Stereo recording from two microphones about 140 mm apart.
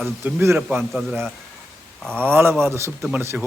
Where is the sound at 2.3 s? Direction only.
15° right (ahead or behind).